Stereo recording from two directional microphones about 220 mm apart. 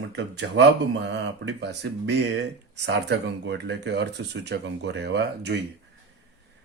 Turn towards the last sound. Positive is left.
turn(degrees=-50)  # may be behind; listen again after turning